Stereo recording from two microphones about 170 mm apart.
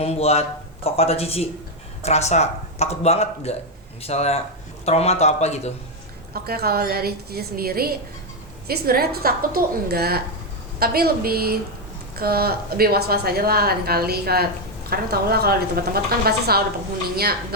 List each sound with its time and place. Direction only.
0.0 s speech: 35° left (ahead or behind)
6.3 s a woman's voice: 65° right (ahead or behind)